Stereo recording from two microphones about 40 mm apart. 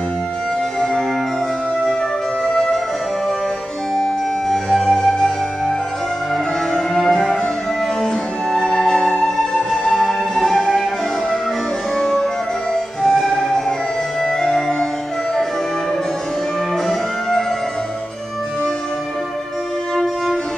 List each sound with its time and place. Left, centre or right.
2.4 s music: left
3.9 s music: centre
9.9 s music: centre
12.0 s music: centre